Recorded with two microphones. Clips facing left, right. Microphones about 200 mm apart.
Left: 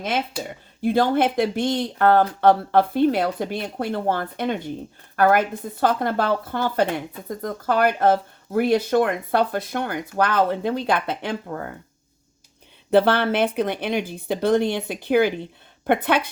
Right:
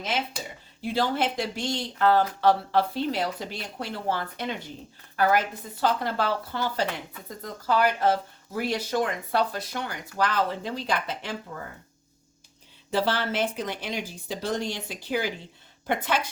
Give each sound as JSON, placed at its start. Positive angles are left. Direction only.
{"t": 0.8, "sound": "speech", "side_deg": 55}
{"t": 12.9, "sound": "speech", "side_deg": 60}